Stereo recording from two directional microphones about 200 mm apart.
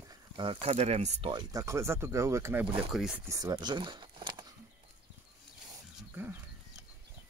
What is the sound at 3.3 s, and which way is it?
Speech, 20° right (ahead or behind).